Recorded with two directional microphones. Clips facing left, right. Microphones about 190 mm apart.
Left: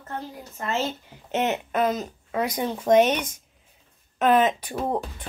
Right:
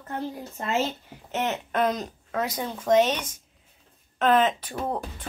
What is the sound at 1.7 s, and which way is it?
Speech, 5° left (ahead or behind).